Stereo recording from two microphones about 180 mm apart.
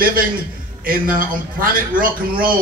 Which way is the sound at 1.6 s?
50° right (ahead or behind).